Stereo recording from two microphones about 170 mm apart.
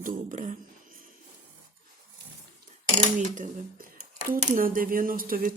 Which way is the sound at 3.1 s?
50° right (ahead or behind).